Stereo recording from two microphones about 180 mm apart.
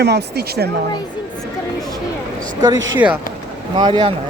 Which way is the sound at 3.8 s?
25° right (ahead or behind).